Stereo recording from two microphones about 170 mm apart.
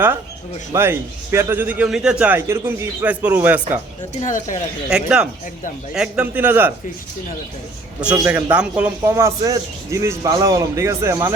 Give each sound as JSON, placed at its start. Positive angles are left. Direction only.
{"t": 0.7, "sound": "a man's voice", "side_deg": -15}
{"t": 4.2, "sound": "speech", "side_deg": 50}
{"t": 4.9, "sound": "a man's voice", "side_deg": -5}
{"t": 8.0, "sound": "a man's voice", "side_deg": -10}